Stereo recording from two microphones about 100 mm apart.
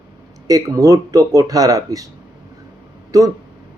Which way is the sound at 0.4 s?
35° right (ahead or behind).